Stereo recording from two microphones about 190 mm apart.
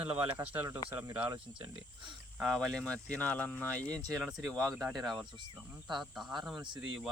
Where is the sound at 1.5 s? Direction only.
25° right (ahead or behind).